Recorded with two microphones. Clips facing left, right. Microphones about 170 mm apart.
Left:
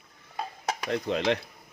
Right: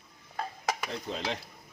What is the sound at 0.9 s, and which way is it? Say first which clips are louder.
Speech: left 8 dB; 70° left (ahead or behind).